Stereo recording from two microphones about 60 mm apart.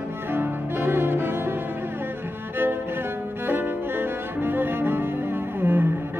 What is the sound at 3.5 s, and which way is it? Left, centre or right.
Cello, right.